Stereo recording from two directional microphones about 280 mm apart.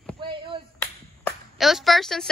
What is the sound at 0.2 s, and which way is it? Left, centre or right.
Clapping, centre.